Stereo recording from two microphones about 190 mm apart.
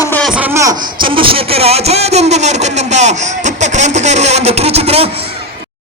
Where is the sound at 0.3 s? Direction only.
5° right (ahead or behind); by 5.2 s 30° right (ahead or behind).